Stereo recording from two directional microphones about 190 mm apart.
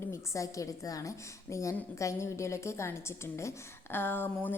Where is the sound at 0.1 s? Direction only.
15° left (ahead or behind).